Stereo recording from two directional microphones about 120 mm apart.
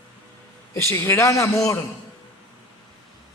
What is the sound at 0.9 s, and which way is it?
Speech, 25° left (ahead or behind).